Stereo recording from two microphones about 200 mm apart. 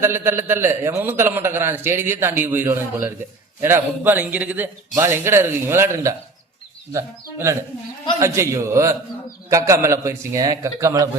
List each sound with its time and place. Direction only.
0.0 s a man's voice: 10° right (ahead or behind)